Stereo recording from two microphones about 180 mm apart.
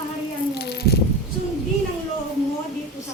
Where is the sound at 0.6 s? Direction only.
65° left (ahead or behind).